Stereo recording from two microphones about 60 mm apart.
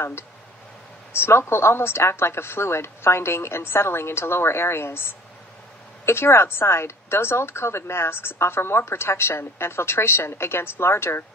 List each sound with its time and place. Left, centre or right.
1.2 s speech: left